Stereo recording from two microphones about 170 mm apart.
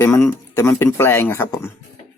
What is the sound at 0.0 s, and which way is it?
Speech, 10° left (ahead or behind).